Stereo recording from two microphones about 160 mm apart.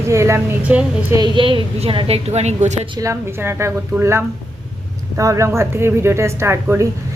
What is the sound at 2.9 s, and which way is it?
Speech, 20° right (ahead or behind).